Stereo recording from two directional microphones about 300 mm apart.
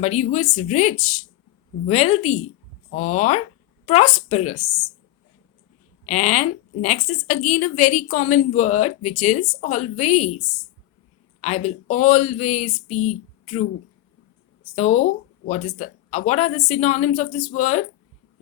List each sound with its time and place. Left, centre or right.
0.0 s a woman's voice: left
6.1 s a woman's voice: left
11.3 s a woman's voice: left
14.8 s a woman's voice: left